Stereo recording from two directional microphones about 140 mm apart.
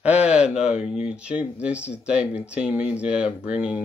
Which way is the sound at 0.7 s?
50° left (ahead or behind).